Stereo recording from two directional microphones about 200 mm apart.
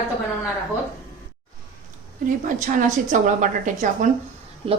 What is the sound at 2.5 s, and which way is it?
A woman's voice, 40° right (ahead or behind).